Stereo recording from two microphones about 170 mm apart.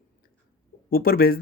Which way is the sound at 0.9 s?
60° left (ahead or behind).